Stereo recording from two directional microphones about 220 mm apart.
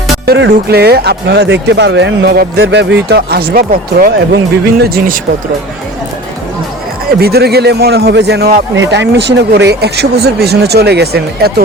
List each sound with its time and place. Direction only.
0.3 s a man's voice: 50° right (ahead or behind)
7.1 s a man's voice: 45° right (ahead or behind)